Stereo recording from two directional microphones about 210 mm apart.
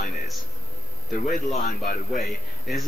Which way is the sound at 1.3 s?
40° left (ahead or behind).